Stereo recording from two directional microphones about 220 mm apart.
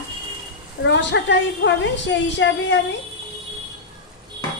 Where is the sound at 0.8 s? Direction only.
55° left (ahead or behind).